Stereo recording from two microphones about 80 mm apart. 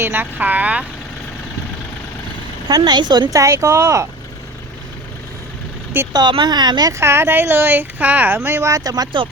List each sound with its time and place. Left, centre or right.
0.0 s speech: right
2.6 s speech: right
3.3 s speech: right
6.1 s speech: right
6.9 s speech: right
8.4 s speech: right
8.7 s speech: right